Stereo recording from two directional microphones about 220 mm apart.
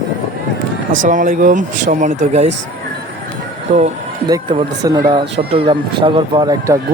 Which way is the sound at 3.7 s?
30° right (ahead or behind).